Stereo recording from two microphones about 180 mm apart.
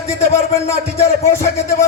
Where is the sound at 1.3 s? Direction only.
15° left (ahead or behind).